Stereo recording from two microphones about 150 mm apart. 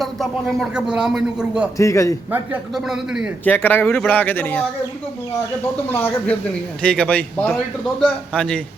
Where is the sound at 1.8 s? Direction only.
20° left (ahead or behind).